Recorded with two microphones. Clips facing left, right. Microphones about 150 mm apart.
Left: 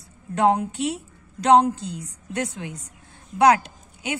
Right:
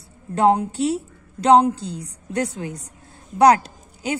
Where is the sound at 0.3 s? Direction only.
35° right (ahead or behind).